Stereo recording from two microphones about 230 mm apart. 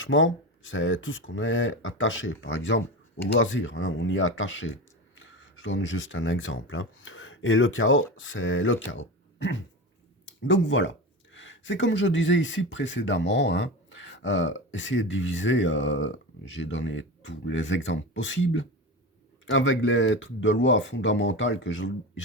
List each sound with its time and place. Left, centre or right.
0.0 s speech: left